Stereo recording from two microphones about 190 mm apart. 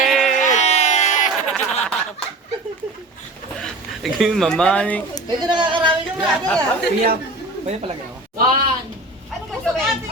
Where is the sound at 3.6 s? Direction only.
Centre (ahead or behind).